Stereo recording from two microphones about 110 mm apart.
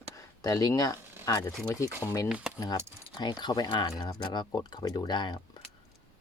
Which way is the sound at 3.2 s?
40° left (ahead or behind).